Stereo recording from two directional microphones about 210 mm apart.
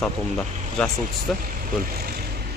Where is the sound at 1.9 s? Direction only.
45° right (ahead or behind).